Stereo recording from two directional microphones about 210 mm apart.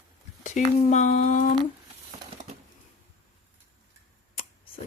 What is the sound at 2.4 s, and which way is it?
Typewriter, 35° right (ahead or behind).